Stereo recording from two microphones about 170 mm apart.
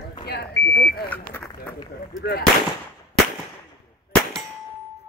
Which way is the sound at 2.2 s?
70° left (ahead or behind).